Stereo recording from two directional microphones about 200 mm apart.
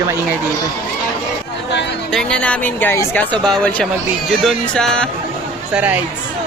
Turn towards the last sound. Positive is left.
turn(degrees=-5)  # may be behind; listen again after turning